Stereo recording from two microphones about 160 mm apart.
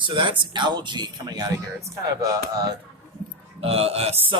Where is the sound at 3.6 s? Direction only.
40° right (ahead or behind).